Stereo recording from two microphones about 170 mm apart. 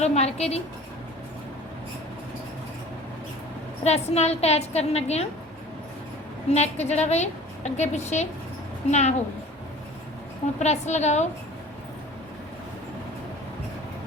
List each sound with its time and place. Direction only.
0.0 s a woman's voice: 40° left (ahead or behind)
3.8 s a woman's voice: 40° left (ahead or behind)
6.5 s a woman's voice: 40° left (ahead or behind)
10.6 s a woman's voice: 40° left (ahead or behind)